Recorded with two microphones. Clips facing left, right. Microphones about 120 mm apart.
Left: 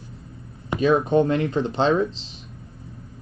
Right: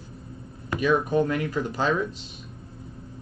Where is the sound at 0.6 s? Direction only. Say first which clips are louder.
Left 4 dB; 25° left (ahead or behind).